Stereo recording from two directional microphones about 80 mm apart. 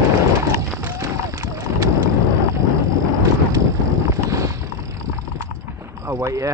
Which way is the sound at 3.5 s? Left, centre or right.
Right.